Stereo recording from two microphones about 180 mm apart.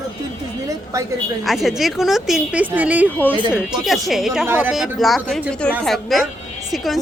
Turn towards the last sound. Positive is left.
turn(degrees=0)  # may be behind; listen again after turning